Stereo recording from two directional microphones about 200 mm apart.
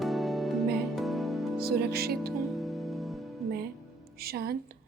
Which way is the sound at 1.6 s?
50° right (ahead or behind).